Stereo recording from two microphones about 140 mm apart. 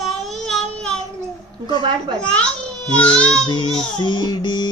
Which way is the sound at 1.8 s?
35° right (ahead or behind).